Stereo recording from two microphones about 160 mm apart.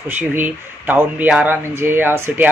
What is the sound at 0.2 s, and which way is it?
Speech, 10° right (ahead or behind).